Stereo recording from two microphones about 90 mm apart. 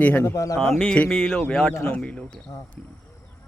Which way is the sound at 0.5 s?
5° left (ahead or behind).